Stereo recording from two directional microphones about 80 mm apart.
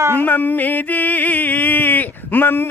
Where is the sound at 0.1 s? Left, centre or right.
Left.